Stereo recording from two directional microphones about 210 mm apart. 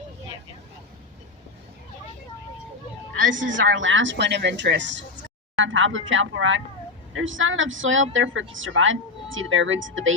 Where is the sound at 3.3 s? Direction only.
65° right (ahead or behind).